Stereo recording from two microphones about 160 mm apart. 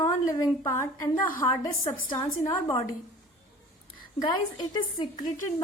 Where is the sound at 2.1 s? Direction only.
30° left (ahead or behind).